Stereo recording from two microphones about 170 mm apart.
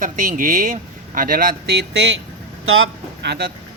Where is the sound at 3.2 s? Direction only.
80° right.